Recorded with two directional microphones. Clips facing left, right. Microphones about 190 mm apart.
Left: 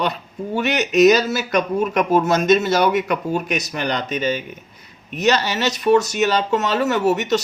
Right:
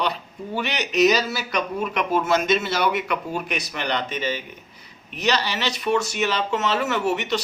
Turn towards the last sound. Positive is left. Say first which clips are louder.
# left 5 dB
turn(degrees=40)  # may be behind; listen again after turning